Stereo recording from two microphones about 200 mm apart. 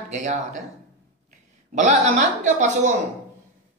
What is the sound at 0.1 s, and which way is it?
Speech, 35° right (ahead or behind).